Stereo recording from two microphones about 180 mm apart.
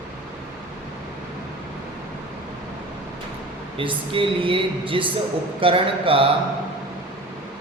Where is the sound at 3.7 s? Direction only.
30° right (ahead or behind).